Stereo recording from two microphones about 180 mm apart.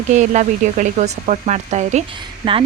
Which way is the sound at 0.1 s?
40° right (ahead or behind).